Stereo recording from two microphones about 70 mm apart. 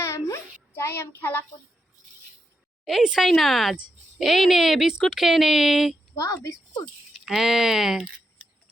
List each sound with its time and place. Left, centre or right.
0.0 s a sound: left
0.7 s a child's voice: left
2.8 s speech: centre
6.1 s a woman's voice: left
7.1 s speech: centre